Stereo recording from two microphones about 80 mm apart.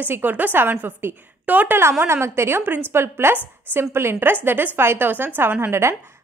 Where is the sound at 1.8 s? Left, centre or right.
Right.